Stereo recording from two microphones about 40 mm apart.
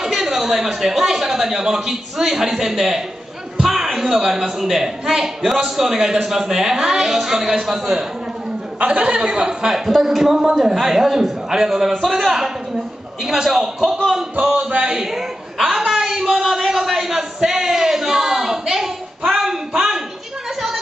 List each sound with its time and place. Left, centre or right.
0.0 s a man's voice: centre
8.8 s speech: right
9.8 s speech: centre
14.7 s a sound: right